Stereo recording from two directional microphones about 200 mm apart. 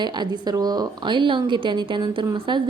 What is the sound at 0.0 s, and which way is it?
A woman's voice, 20° right (ahead or behind).